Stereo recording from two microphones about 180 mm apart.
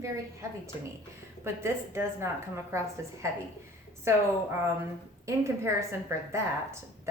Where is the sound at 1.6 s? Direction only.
15° right (ahead or behind).